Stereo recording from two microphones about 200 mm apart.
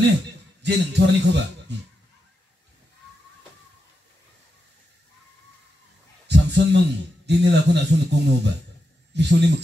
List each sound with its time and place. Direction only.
0.6 s a man's voice: 60° right (ahead or behind)
6.2 s a sound: 60° right (ahead or behind)
7.2 s a man's voice: 60° right (ahead or behind)